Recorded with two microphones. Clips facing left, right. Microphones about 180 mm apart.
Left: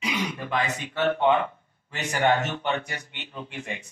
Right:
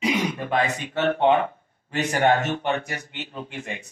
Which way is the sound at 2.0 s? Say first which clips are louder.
Right 3 dB; 35° right (ahead or behind).